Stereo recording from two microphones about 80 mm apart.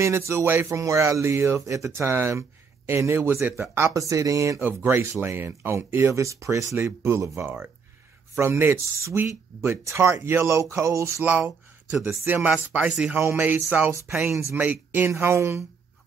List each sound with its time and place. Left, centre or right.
0.0 s speech: right
4.8 s speech: right
12.0 s speech: right
14.1 s speech: centre
14.6 s speech: right
15.0 s speech: right